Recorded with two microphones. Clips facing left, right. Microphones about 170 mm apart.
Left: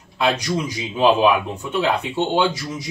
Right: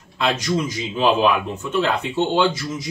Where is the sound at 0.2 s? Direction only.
10° left (ahead or behind).